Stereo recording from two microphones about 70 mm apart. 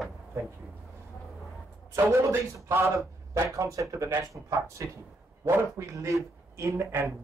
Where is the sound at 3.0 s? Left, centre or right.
Right.